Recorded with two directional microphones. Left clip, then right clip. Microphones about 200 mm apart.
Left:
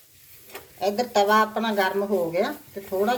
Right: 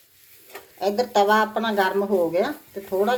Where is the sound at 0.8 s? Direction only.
35° right (ahead or behind).